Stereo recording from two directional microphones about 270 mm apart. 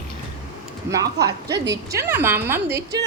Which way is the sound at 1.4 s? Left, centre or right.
Right.